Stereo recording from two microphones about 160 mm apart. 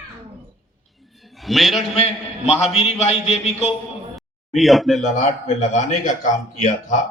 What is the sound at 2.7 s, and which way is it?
Speech, 40° left (ahead or behind).